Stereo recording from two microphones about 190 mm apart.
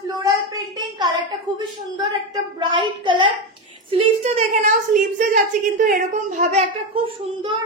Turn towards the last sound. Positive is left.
turn(degrees=-25)  # may be behind; listen again after turning